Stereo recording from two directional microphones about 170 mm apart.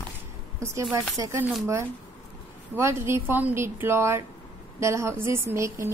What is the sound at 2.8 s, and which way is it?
A woman's voice, 15° right (ahead or behind).